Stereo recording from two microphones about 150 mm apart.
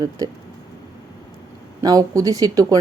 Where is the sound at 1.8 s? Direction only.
25° right (ahead or behind).